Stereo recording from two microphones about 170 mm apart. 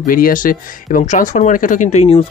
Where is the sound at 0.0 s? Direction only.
55° left (ahead or behind).